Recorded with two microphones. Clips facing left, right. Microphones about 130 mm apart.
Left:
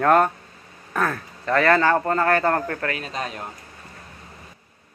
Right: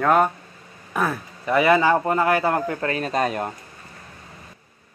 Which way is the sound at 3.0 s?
50° right (ahead or behind).